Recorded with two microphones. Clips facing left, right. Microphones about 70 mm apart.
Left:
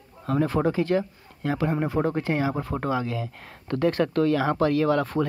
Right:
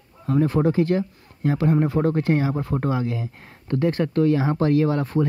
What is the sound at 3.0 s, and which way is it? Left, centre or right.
Speech, right.